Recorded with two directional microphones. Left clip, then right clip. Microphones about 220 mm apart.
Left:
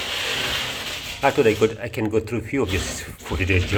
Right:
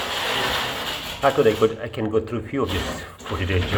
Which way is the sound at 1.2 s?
35° left (ahead or behind).